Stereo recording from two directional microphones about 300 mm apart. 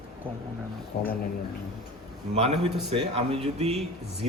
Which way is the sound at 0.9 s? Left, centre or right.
Left.